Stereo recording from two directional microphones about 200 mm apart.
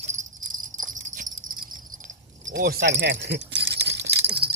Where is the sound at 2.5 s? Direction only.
50° right (ahead or behind).